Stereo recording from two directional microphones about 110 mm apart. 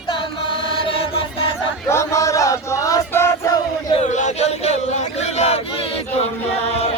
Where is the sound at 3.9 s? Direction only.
90° left.